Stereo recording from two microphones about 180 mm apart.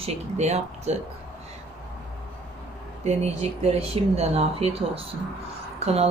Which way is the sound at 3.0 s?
35° right (ahead or behind).